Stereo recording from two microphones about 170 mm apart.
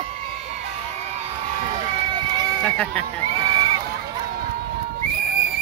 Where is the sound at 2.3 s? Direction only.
25° right (ahead or behind).